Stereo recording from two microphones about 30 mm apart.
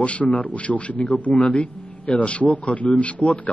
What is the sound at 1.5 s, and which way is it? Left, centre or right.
Speech, left.